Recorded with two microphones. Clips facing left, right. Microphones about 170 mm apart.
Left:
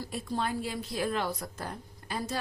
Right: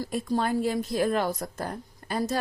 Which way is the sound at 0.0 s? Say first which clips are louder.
Right 6 dB; 45° right (ahead or behind).